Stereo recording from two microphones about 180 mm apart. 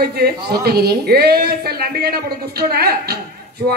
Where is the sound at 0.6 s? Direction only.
60° right (ahead or behind).